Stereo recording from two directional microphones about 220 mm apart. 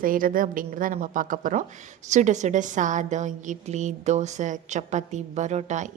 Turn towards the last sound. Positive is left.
turn(degrees=-30)  # may be behind; listen again after turning